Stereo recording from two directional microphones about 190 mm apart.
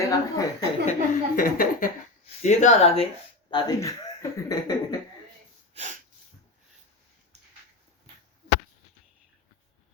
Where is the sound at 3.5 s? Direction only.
20° left (ahead or behind).